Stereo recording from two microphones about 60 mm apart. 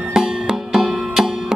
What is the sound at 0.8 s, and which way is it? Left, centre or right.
Music, centre.